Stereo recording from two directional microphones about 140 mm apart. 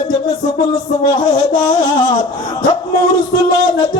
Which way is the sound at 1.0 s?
30° left (ahead or behind).